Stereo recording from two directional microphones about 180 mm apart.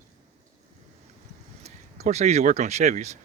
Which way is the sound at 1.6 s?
35° right (ahead or behind).